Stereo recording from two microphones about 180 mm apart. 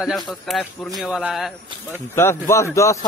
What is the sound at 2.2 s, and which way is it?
Speech, 15° left (ahead or behind).